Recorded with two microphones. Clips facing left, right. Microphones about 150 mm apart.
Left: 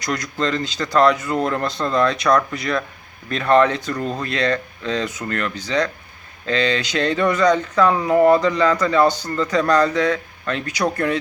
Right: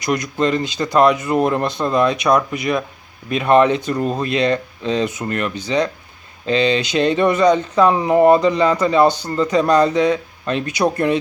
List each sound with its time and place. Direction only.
0.0 s speech: 20° right (ahead or behind)